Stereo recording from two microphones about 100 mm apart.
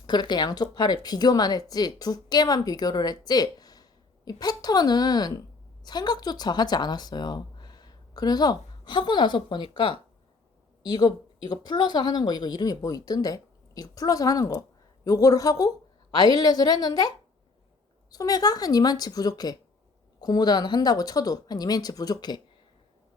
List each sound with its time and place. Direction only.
0.1 s a woman's voice: 45° left (ahead or behind)